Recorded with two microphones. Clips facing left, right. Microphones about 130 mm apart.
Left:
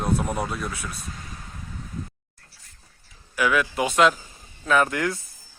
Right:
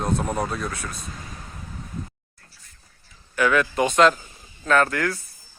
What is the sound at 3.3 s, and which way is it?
Speech, 10° left (ahead or behind).